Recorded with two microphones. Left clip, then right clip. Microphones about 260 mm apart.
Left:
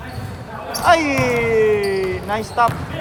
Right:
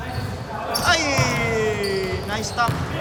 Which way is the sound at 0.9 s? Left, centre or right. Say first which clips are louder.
Left 6 dB; left.